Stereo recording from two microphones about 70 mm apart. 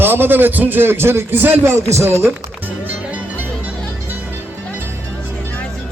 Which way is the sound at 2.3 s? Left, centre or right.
Right.